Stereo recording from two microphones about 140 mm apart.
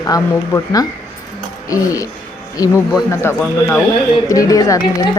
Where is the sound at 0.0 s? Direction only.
25° left (ahead or behind).